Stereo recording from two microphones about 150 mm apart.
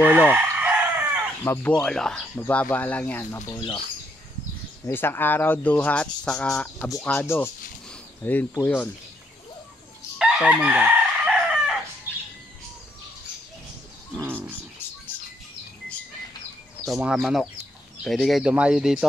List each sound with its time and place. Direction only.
0.0 s chicken: 10° right (ahead or behind)
1.4 s speech: 15° left (ahead or behind)
1.7 s speech: 5° left (ahead or behind)
4.8 s speech: 15° left (ahead or behind)
10.1 s chicken: 5° right (ahead or behind)
14.1 s bird: 15° right (ahead or behind)
16.8 s speech: centre (ahead or behind)